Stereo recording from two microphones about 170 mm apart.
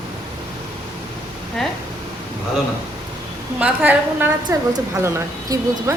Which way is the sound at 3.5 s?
10° right (ahead or behind).